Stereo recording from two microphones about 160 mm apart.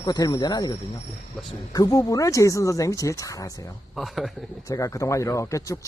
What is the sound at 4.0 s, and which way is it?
Speech, centre (ahead or behind).